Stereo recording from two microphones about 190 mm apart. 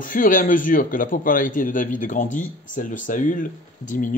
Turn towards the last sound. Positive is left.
turn(degrees=45)  # may be behind; listen again after turning